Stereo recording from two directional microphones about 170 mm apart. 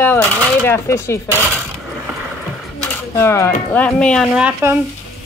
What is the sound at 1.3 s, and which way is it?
Speech, 10° right (ahead or behind).